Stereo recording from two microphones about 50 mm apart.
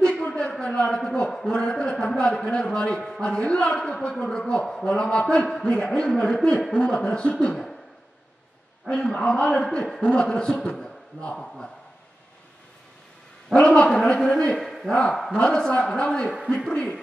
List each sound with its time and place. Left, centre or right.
0.0 s a sound: left
1.3 s a man's voice: centre
8.8 s a man's voice: left
11.3 s a man's voice: centre
13.6 s a man's voice: left
14.6 s a sound: centre
14.9 s a man's voice: centre